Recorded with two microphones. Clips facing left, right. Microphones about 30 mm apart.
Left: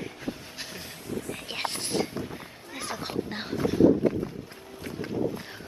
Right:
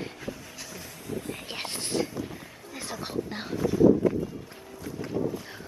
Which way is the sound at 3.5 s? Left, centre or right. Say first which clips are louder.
Even; left.